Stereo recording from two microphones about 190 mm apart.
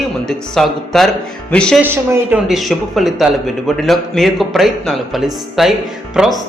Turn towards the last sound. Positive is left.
turn(degrees=0)  # may be behind; listen again after turning